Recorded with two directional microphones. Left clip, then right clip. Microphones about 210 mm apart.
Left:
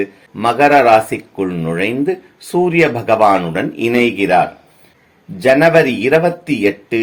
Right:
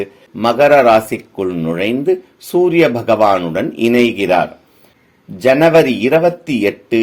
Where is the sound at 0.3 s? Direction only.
40° right (ahead or behind).